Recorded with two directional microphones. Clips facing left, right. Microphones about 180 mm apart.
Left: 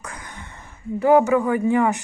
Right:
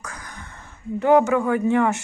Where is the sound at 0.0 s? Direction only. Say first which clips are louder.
Left 1 dB; 30° left (ahead or behind).